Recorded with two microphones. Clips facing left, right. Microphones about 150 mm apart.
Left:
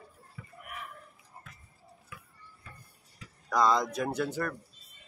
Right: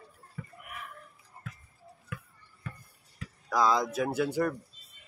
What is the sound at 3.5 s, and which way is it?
Speech, centre (ahead or behind).